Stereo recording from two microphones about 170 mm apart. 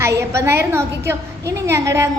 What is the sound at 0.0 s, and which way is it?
A woman's voice, 15° right (ahead or behind).